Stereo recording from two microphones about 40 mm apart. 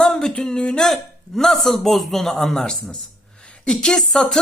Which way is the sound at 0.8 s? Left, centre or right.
Centre.